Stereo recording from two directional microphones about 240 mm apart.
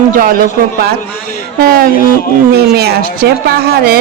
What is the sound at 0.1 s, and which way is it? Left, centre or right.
Speech, right.